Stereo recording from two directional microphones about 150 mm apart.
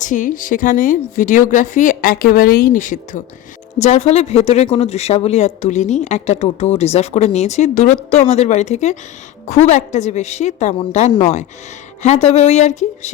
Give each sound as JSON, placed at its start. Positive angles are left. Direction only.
{"t": 0.0, "sound": "a woman's voice", "side_deg": 60}
{"t": 12.0, "sound": "speech", "side_deg": 45}